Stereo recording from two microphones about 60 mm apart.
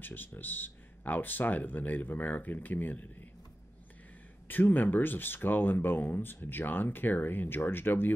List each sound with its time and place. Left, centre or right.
0.0 s speech: left
4.5 s speech: left